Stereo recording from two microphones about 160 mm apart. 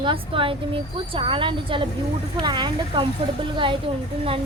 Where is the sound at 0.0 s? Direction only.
30° right (ahead or behind).